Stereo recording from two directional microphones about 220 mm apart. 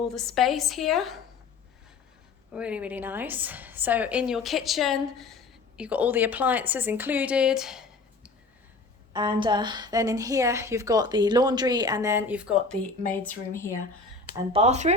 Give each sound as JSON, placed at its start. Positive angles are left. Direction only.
{"t": 0.0, "sound": "a woman's voice", "side_deg": 0}
{"t": 2.5, "sound": "a woman's voice", "side_deg": -5}
{"t": 9.1, "sound": "a woman's voice", "side_deg": -20}
{"t": 13.5, "sound": "speech", "side_deg": 10}
{"t": 14.5, "sound": "speech", "side_deg": -30}